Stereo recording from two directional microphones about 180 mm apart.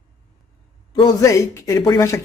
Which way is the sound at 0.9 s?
20° left (ahead or behind).